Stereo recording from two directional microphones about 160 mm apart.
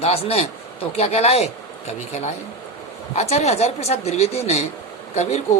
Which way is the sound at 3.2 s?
45° left (ahead or behind).